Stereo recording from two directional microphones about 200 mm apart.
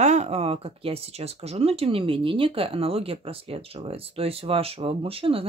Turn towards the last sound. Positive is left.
turn(degrees=-30)  # may be behind; listen again after turning